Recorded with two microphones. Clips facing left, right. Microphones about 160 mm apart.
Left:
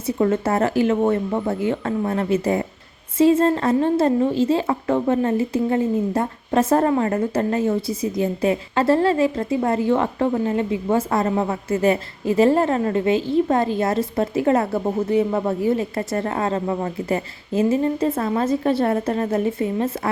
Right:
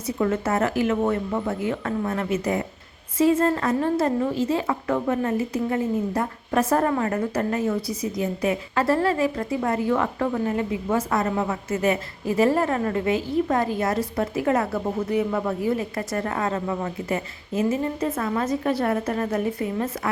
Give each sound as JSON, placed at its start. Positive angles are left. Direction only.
{"t": 0.2, "sound": "a woman's voice", "side_deg": 30}